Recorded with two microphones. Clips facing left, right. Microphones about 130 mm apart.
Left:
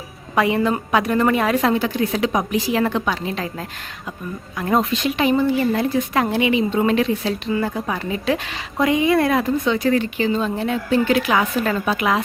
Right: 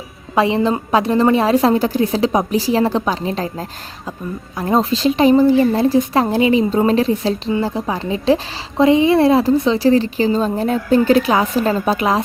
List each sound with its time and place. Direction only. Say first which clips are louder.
0.3 s speech: right 3 dB; 30° right (ahead or behind)